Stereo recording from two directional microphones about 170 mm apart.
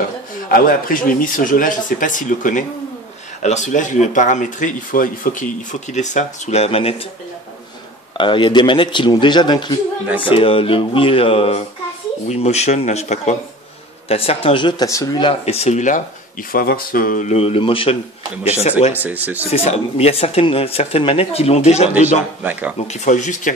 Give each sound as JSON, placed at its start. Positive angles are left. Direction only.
{"t": 0.5, "sound": "speech", "side_deg": 55}
{"t": 8.2, "sound": "a man's voice", "side_deg": 30}
{"t": 15.4, "sound": "speech", "side_deg": 40}
{"t": 16.5, "sound": "speech", "side_deg": 60}
{"t": 22.4, "sound": "speech", "side_deg": -10}
{"t": 22.8, "sound": "speech", "side_deg": 45}